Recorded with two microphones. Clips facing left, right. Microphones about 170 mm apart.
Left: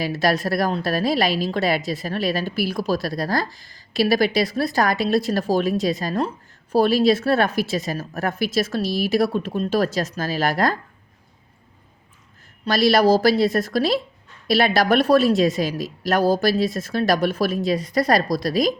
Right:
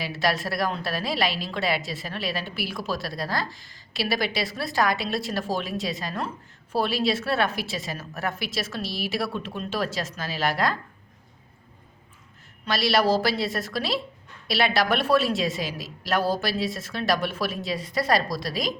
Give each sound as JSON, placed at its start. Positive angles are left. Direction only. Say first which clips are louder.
{"t": 0.0, "sound": "a woman's voice", "louder": "left 5 dB", "side_deg": 40}
{"t": 12.6, "sound": "a woman's voice", "louder": "left 6 dB", "side_deg": 40}